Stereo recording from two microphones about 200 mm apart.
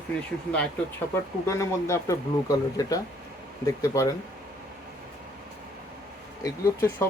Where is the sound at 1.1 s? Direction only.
15° left (ahead or behind).